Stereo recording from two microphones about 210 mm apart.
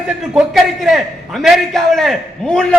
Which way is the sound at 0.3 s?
Centre (ahead or behind).